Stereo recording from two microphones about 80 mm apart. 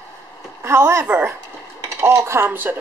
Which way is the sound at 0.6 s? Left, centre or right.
Right.